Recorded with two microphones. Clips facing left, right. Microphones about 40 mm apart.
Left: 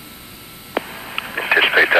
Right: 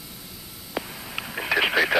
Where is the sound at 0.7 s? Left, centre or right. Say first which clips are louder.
Left 7 dB; left.